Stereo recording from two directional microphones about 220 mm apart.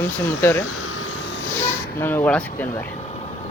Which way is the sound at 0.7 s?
70° left (ahead or behind).